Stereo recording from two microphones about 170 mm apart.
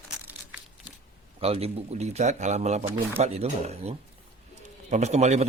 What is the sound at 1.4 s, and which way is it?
A man's voice, 35° right (ahead or behind).